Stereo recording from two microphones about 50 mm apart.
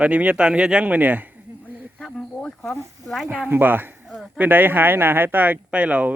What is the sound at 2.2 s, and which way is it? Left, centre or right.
Snake, centre.